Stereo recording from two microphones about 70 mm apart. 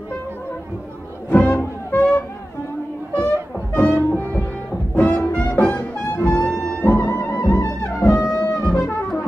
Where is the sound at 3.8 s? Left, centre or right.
Left.